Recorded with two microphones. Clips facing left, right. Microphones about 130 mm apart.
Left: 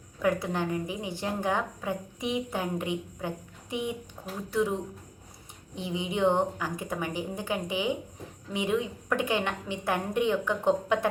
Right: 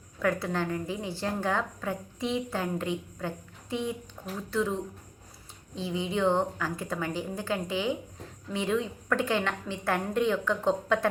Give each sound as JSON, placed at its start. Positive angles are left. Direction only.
{"t": 0.2, "sound": "a woman's voice", "side_deg": 15}